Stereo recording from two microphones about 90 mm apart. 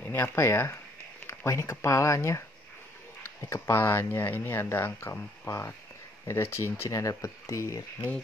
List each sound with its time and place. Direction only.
0.0 s speech: 25° left (ahead or behind)
5.5 s speech: 35° left (ahead or behind)